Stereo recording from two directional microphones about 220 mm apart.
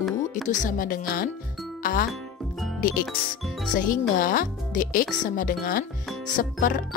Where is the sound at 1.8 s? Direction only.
40° left (ahead or behind).